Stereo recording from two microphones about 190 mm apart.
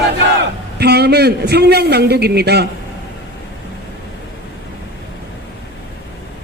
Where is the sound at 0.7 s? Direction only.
60° right (ahead or behind).